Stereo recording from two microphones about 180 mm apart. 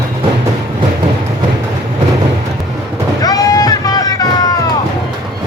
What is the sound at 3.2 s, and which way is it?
Boat, 20° left (ahead or behind).